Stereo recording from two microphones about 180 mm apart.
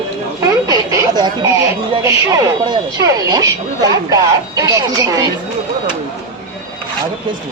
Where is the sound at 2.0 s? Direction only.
20° right (ahead or behind).